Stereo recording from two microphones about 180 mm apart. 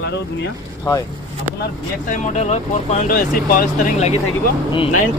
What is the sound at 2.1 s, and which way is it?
Speech, 40° left (ahead or behind).